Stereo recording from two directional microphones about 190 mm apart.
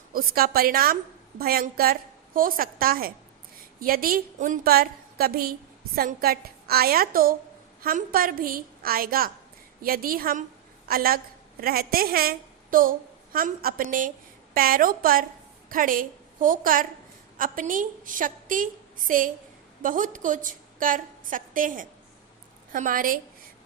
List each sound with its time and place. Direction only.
0.1 s a woman's voice: 50° right (ahead or behind)